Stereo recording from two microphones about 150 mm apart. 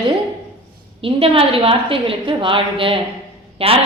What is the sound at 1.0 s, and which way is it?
A woman's voice, 40° right (ahead or behind).